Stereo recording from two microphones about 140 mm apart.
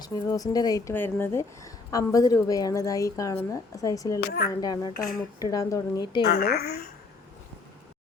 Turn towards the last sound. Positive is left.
turn(degrees=90)